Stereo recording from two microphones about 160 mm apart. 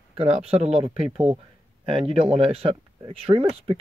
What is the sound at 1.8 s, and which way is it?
Speech, 35° right (ahead or behind).